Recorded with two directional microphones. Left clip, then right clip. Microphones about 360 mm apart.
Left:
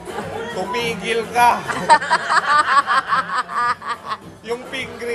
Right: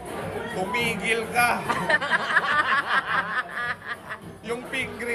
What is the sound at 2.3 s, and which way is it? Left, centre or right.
Snicker, centre.